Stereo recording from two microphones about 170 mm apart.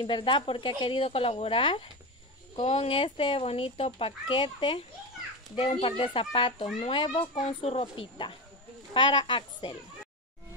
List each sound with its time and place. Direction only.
0.0 s a woman's voice: 30° left (ahead or behind)